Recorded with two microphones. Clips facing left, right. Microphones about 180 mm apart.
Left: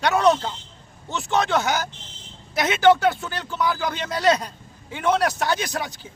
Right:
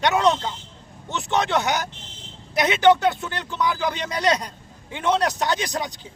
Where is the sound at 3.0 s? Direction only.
20° right (ahead or behind).